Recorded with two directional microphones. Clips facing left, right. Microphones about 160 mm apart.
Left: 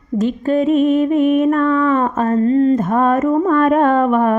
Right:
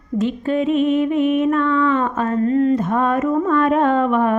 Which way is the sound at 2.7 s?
45° left (ahead or behind).